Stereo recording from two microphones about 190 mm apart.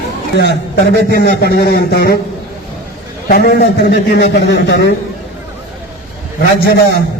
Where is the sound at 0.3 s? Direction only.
60° left (ahead or behind).